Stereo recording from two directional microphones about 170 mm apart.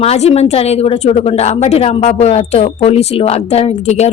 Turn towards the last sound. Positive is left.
turn(degrees=40)  # may be behind; listen again after turning